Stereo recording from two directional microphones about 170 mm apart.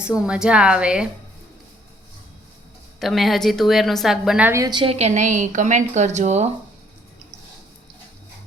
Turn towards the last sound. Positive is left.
turn(degrees=-40)  # may be behind; listen again after turning